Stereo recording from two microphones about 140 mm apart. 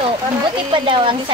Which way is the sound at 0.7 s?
35° right (ahead or behind).